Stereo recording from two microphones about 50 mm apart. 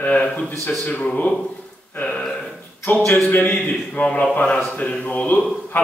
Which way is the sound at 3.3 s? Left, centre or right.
Left.